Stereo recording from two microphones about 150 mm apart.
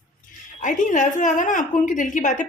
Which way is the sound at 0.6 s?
55° left (ahead or behind).